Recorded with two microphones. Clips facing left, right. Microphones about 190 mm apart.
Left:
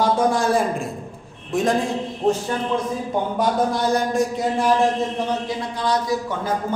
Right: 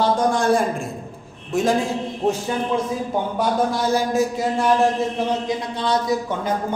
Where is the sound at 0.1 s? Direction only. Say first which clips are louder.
Even; 5° left (ahead or behind).